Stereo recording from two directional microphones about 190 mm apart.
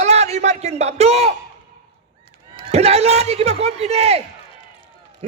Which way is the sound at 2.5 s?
35° right (ahead or behind).